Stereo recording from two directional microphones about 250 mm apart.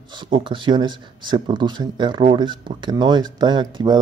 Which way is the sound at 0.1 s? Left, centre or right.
Centre.